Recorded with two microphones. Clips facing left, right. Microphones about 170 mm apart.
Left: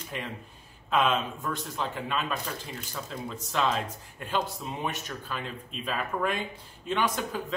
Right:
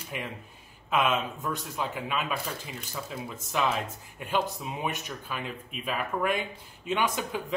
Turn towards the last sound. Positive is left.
turn(degrees=-10)  # may be behind; listen again after turning